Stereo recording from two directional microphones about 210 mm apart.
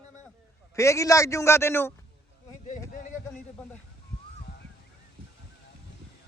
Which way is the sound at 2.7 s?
40° left (ahead or behind).